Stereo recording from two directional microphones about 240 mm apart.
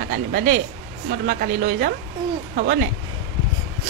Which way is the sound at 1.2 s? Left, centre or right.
Right.